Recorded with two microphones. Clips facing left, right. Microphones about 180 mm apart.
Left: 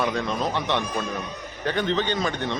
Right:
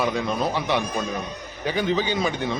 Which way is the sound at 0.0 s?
5° right (ahead or behind).